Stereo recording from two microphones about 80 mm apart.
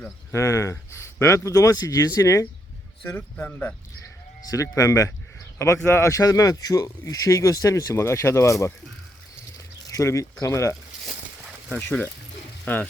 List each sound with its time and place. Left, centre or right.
0.3 s speech: left
3.1 s speech: centre
4.4 s speech: left
9.8 s a sound: left
10.4 s speech: left
11.7 s speech: left